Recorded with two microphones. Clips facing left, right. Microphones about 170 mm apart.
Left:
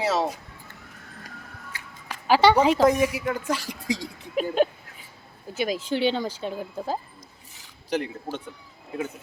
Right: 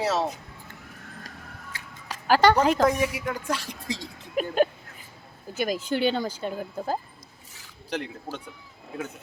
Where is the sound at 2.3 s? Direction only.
Centre (ahead or behind).